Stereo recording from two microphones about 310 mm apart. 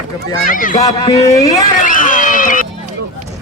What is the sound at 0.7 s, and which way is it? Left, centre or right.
Speech, centre.